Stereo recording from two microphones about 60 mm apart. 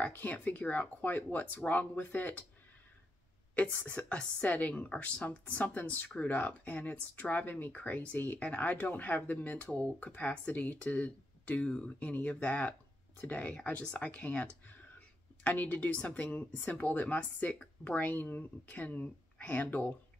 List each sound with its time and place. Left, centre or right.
0.0 s a woman's voice: left
3.5 s a woman's voice: left
13.8 s a sound: left
15.5 s a woman's voice: left